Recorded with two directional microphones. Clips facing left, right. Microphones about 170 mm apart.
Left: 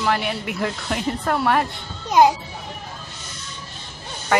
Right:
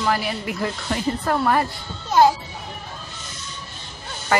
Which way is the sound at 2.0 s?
15° left (ahead or behind).